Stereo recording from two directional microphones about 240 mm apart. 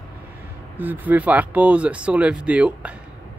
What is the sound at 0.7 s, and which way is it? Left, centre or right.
Speech, centre.